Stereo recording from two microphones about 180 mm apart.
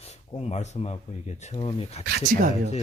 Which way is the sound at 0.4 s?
35° left (ahead or behind).